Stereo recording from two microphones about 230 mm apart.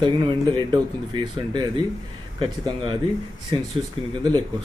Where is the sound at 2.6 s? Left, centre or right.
Right.